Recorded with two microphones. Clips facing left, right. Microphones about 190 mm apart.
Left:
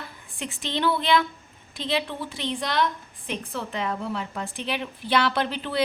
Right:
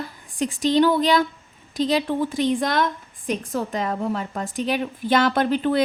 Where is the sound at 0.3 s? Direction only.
40° right (ahead or behind).